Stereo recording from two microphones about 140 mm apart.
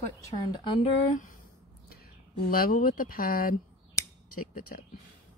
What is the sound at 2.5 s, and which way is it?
Speech, 90° left.